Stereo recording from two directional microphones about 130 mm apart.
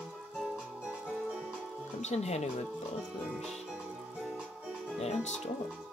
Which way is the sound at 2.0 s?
60° left (ahead or behind).